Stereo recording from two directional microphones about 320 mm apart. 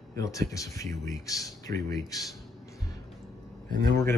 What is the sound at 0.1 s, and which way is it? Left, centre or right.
Speech, centre.